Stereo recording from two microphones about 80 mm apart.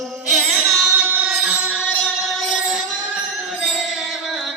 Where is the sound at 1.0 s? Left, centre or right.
Centre.